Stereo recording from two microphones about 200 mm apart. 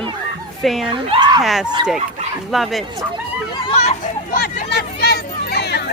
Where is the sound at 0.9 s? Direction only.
25° right (ahead or behind).